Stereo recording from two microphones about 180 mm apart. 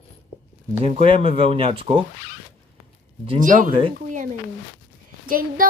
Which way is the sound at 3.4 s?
45° right (ahead or behind).